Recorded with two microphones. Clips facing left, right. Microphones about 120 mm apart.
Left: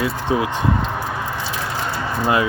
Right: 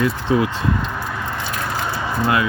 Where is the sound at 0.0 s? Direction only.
20° left (ahead or behind).